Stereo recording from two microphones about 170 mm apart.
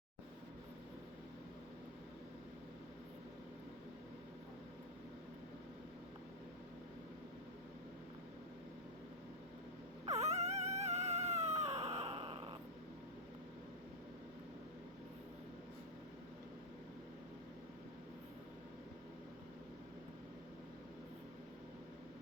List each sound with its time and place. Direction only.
10.1 s dog: 40° right (ahead or behind)